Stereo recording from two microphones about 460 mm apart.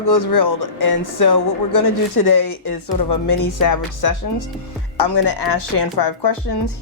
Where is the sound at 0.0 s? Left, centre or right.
Left.